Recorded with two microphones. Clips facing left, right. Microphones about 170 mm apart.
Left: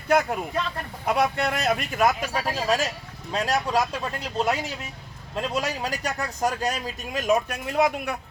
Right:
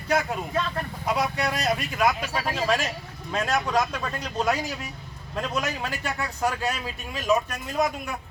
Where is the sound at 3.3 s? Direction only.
35° left (ahead or behind); by 8.1 s 65° left (ahead or behind).